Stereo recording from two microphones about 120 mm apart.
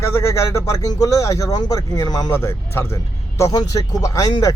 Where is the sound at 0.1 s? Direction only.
25° left (ahead or behind).